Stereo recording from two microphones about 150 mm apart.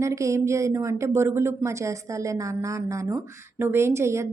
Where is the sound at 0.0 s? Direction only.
20° right (ahead or behind).